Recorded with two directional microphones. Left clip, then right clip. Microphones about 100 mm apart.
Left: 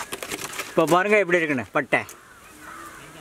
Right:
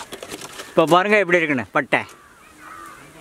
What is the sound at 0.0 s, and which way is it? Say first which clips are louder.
Pigeon: left 2 dB; 5° left (ahead or behind).